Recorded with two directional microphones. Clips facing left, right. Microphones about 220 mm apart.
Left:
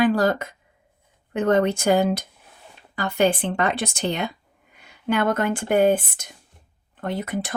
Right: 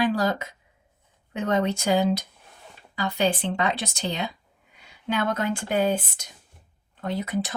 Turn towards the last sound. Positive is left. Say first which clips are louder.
# left 1 dB
turn(degrees=55)  # may be behind; listen again after turning